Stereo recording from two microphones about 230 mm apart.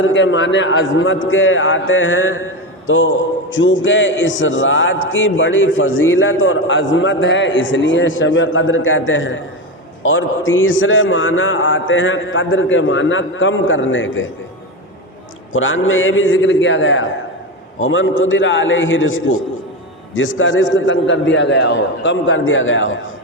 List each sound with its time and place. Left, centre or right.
0.0 s a man's voice: left
15.5 s a man's voice: left